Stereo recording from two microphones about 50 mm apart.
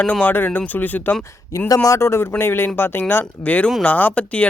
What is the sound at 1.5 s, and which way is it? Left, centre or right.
Speech, left.